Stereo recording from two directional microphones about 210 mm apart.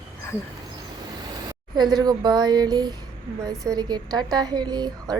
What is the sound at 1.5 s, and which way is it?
A woman's voice, 20° right (ahead or behind).